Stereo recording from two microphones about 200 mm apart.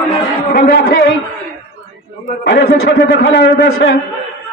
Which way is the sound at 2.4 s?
50° left (ahead or behind).